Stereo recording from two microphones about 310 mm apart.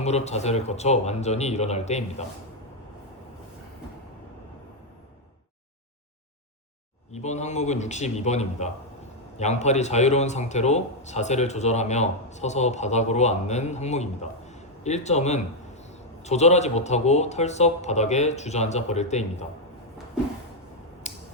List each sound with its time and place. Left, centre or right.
0.0 s a man's voice: left
7.1 s a man's voice: left
21.0 s scissors: left